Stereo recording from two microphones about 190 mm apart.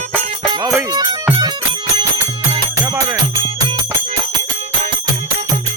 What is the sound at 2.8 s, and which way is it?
Music, 10° right (ahead or behind).